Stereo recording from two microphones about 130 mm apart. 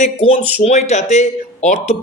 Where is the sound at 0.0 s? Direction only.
55° left (ahead or behind).